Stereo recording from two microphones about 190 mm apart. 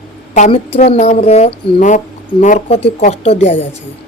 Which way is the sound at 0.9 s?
35° left (ahead or behind).